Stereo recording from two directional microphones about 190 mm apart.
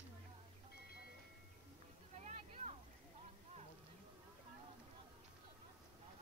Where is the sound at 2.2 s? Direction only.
35° right (ahead or behind).